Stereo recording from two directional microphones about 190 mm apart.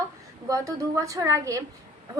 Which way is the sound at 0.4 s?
15° right (ahead or behind).